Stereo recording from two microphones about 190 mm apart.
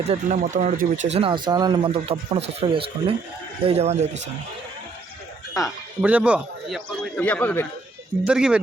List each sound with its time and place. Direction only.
0.0 s speech: 40° right (ahead or behind)
1.1 s speech: 25° right (ahead or behind)
6.0 s a man's voice: 5° right (ahead or behind); by 7.7 s 10° left (ahead or behind)
8.2 s a man's voice: 5° right (ahead or behind)